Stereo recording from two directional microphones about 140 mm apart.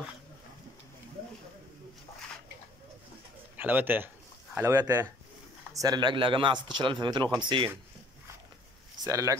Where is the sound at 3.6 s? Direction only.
15° right (ahead or behind).